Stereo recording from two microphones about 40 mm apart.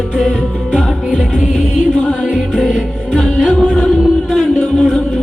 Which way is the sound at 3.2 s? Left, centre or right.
Centre.